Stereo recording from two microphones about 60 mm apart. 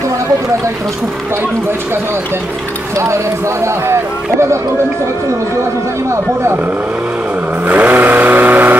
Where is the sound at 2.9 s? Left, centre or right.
Right.